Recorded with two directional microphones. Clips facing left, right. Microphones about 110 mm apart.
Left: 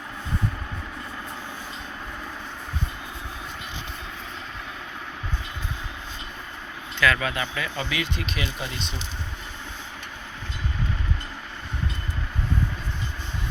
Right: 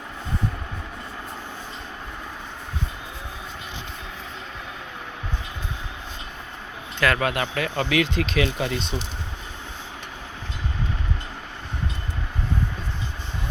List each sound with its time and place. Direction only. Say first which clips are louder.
7.0 s speech: right 2 dB; 55° right (ahead or behind); by 8.7 s 90° right